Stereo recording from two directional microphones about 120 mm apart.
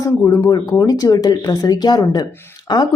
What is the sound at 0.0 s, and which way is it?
Speech, 30° left (ahead or behind).